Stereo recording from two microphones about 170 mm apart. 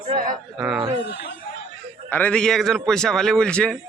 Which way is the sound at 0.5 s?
Centre (ahead or behind).